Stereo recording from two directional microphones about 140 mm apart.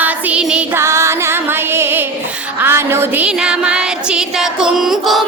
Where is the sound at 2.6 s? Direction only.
15° right (ahead or behind).